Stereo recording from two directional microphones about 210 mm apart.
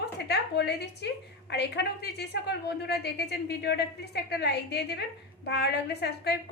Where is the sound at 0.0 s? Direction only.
50° left (ahead or behind).